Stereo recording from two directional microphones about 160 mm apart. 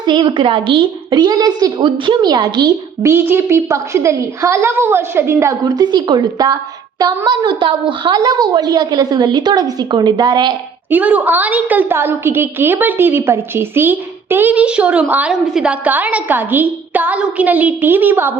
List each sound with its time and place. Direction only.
0.0 s a woman's voice: 30° right (ahead or behind)
10.8 s a woman's voice: 10° right (ahead or behind)